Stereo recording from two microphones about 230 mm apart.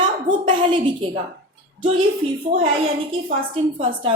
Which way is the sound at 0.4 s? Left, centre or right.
Right.